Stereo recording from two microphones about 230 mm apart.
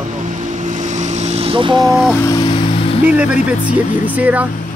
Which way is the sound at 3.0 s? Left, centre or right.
Centre.